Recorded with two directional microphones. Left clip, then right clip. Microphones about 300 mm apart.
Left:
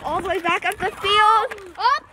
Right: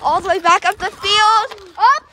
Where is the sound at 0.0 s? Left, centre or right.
Centre.